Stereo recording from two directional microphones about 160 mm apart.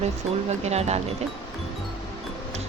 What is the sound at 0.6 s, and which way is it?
Speech, 45° right (ahead or behind).